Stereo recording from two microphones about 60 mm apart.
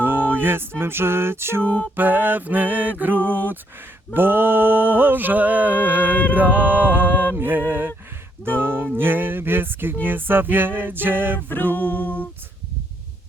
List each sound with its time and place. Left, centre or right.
0.0 s music: right
1.6 s a capella: left
2.0 s speech: right
6.3 s music: right
7.3 s speech: right
11.3 s a capella: left